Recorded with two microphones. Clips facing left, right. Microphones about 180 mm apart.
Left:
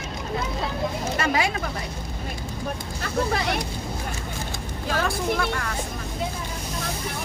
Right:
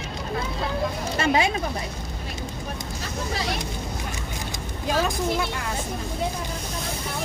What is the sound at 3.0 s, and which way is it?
Speech, 60° left (ahead or behind).